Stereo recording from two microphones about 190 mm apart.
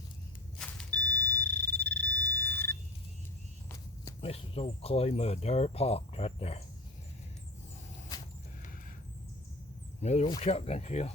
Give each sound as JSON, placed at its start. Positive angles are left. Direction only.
{"t": 0.6, "sound": "fire alarm", "side_deg": 5}
{"t": 4.2, "sound": "speech", "side_deg": 30}
{"t": 10.0, "sound": "speech", "side_deg": 35}